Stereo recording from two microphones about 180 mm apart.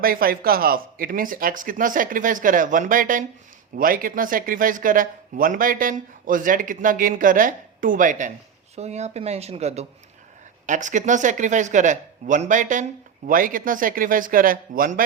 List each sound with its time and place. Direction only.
0.0 s speech: 55° right (ahead or behind)